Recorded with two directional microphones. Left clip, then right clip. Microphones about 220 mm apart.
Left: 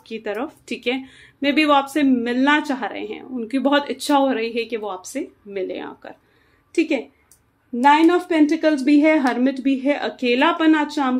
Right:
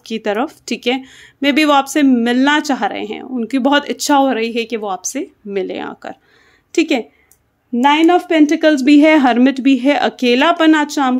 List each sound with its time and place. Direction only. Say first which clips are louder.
0.0 s speech: right 8 dB; 45° right (ahead or behind)
7.8 s speech: right 3 dB; 40° right (ahead or behind)